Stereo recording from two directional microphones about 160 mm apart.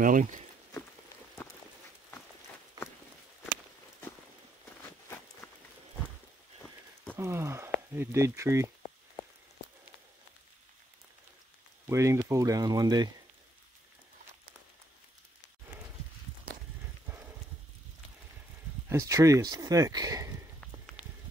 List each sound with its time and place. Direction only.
0.0 s speech: 55° right (ahead or behind)
7.2 s a sound: 15° right (ahead or behind)
7.9 s speech: 15° right (ahead or behind)
11.9 s speech: 20° right (ahead or behind)
18.9 s speech: 20° right (ahead or behind)